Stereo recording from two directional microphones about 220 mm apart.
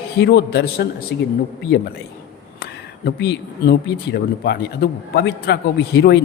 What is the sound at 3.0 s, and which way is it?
Speech, 50° left (ahead or behind).